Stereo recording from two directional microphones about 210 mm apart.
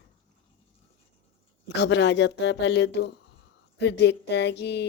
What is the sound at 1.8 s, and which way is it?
Speech, 55° left (ahead or behind).